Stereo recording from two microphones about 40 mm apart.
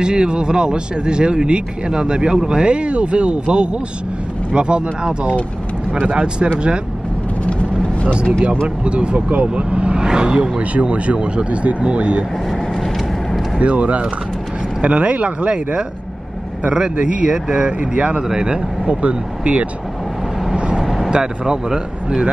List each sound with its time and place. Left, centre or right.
0.0 s speech: right
7.4 s vehicle: left
8.1 s speech: right
10.6 s speech: right
13.6 s speech: right; by 22.3 s centre